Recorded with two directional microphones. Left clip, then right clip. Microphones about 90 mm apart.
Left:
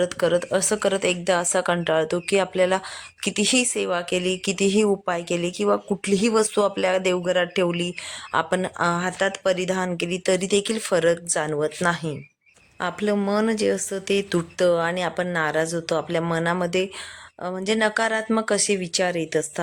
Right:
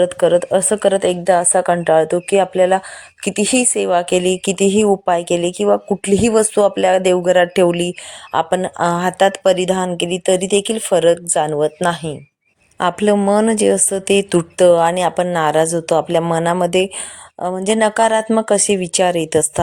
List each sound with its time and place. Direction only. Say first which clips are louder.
0.0 s a woman's voice: right 8 dB; 40° right (ahead or behind)
4.0 s speech: right 8 dB; 65° right (ahead or behind)
4.5 s a woman's voice: right 5 dB; 40° right (ahead or behind)
5.0 s speech: right 9 dB; 50° right (ahead or behind)
8.3 s a woman's voice: right 6 dB; 35° right (ahead or behind)
9.0 s a woman's voice: right 9 dB; 70° right (ahead or behind); by 12.1 s 40° right (ahead or behind)
13.0 s a woman's voice: right 8 dB; 85° right; by 18.3 s 70° right (ahead or behind)
18.3 s a woman's voice: right 7 dB; 50° right (ahead or behind); by 19.5 s 85° right